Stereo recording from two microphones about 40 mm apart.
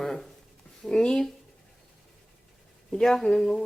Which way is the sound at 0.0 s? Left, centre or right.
Centre.